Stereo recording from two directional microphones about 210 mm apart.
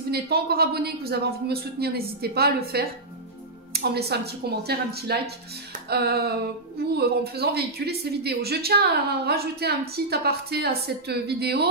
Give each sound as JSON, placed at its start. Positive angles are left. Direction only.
{"t": 0.1, "sound": "speech", "side_deg": -50}